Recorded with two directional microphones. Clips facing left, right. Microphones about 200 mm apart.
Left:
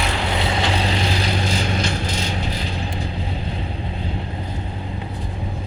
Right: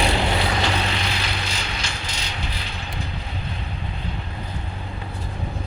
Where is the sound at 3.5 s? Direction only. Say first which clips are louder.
Left 5 dB; 30° left (ahead or behind).